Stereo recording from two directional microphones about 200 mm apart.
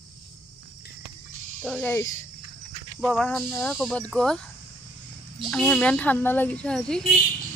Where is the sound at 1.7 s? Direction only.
10° left (ahead or behind).